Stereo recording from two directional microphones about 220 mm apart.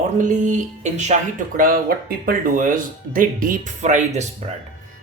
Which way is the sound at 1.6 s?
40° right (ahead or behind).